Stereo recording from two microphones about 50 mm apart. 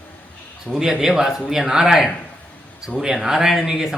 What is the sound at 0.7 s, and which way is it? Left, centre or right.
Speech, centre.